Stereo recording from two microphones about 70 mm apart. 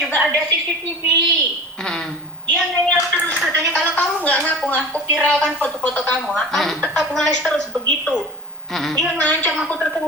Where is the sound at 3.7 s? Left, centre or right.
Left.